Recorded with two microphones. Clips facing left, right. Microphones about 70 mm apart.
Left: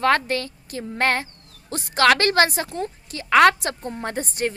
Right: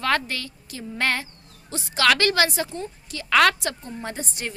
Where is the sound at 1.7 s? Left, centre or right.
Left.